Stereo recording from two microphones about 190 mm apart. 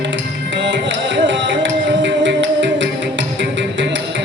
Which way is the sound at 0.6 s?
75° right (ahead or behind).